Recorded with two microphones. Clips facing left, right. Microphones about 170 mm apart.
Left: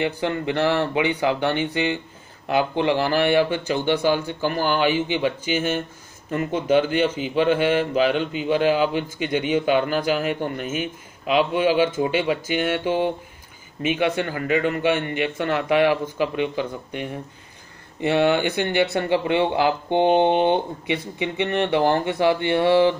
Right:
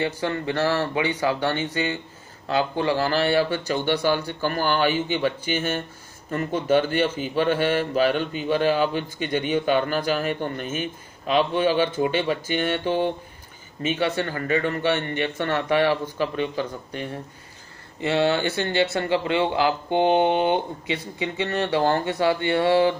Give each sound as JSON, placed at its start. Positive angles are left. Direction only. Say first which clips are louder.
{"t": 0.0, "sound": "a man's voice", "louder": "left 2 dB", "side_deg": 15}